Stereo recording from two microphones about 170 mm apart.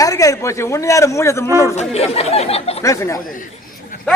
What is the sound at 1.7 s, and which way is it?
Speech, 40° left (ahead or behind).